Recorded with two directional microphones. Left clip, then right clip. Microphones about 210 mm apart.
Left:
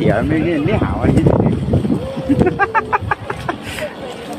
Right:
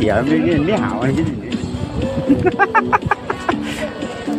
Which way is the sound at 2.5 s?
20° right (ahead or behind).